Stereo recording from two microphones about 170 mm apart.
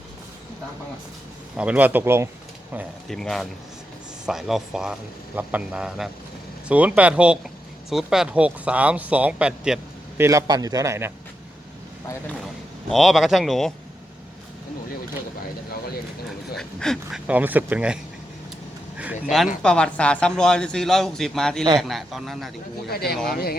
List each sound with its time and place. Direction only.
1.5 s speech: 5° right (ahead or behind)
3.1 s a man's voice: centre (ahead or behind)
10.2 s a man's voice: 20° right (ahead or behind)
12.9 s a man's voice: centre (ahead or behind)
16.6 s a man's voice: centre (ahead or behind)
22.9 s speech: 65° left (ahead or behind)